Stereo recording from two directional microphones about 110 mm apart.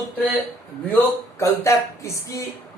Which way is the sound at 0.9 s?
25° left (ahead or behind).